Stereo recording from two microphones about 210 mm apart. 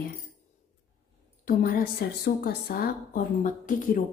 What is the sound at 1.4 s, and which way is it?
Speech, 45° left (ahead or behind).